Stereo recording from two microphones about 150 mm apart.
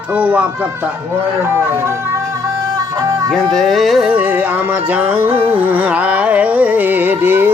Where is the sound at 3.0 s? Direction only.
25° right (ahead or behind).